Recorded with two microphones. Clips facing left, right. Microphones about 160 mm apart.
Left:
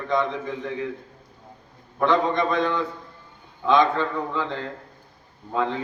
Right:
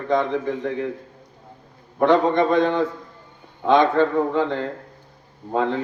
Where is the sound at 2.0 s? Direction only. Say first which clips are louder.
Right 4 dB; 55° right (ahead or behind).